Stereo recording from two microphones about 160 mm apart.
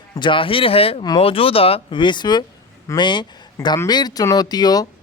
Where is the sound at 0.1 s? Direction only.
30° left (ahead or behind).